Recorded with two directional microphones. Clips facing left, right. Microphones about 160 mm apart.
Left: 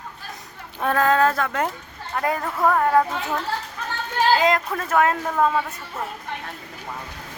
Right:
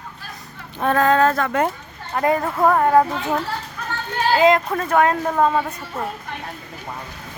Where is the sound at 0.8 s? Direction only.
Centre (ahead or behind).